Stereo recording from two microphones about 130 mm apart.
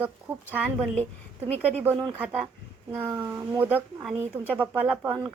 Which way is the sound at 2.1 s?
10° right (ahead or behind).